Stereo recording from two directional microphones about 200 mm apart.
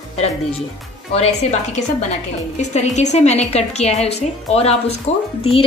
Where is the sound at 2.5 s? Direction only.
35° left (ahead or behind).